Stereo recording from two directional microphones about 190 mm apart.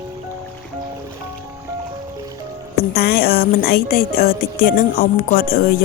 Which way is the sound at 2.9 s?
55° left (ahead or behind).